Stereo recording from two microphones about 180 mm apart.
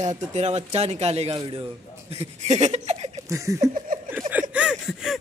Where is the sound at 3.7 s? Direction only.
50° right (ahead or behind).